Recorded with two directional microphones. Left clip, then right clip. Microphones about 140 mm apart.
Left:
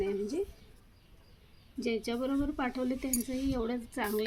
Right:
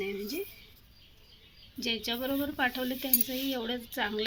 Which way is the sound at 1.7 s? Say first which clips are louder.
Right 1 dB; 15° left (ahead or behind).